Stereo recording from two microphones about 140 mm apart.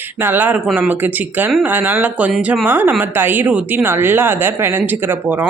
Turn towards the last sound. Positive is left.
turn(degrees=-15)  # may be behind; listen again after turning